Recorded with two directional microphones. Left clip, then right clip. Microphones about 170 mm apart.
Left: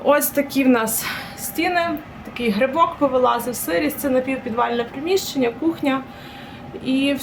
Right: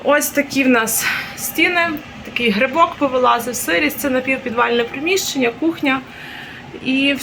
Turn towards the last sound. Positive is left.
turn(degrees=0)  # may be behind; listen again after turning